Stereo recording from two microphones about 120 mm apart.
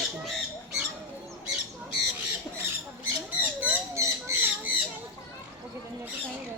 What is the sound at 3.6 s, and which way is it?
Squawk, 15° right (ahead or behind).